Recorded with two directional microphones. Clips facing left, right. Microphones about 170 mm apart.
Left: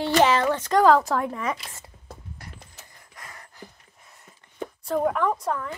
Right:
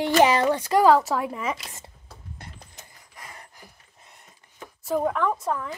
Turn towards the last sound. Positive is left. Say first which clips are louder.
# even
turn(degrees=-5)  # may be behind; listen again after turning